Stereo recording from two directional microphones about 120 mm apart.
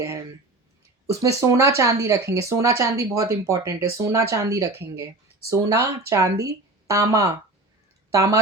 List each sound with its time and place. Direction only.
1.0 s speech: 25° right (ahead or behind)